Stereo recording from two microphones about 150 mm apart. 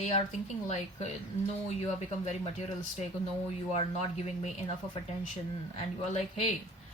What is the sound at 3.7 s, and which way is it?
Speech, 45° left (ahead or behind).